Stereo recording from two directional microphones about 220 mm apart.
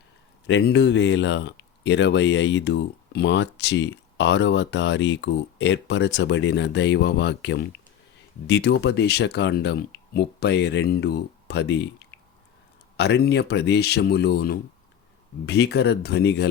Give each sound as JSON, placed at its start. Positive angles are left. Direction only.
{"t": 0.4, "sound": "speech", "side_deg": 55}
{"t": 13.0, "sound": "speech", "side_deg": 50}